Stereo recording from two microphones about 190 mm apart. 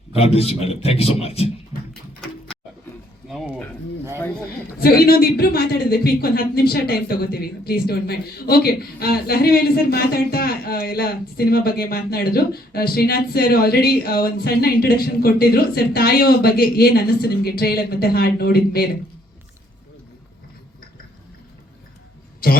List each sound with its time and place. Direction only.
0.2 s a man's voice: 30° left (ahead or behind)
1.9 s a sound: 5° left (ahead or behind)
3.2 s speech: centre (ahead or behind)
4.8 s speech: 55° left (ahead or behind)